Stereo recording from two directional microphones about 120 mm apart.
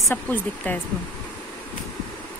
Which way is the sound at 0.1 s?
15° left (ahead or behind).